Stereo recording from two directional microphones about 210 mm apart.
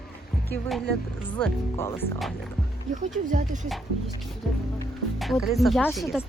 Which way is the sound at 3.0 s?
35° right (ahead or behind).